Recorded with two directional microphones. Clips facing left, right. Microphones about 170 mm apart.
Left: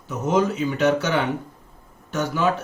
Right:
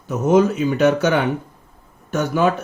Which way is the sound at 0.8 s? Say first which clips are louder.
Right 4 dB; 50° right (ahead or behind).